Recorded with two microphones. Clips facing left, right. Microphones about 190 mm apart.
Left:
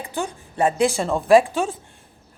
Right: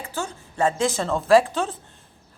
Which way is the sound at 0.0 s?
15° left (ahead or behind).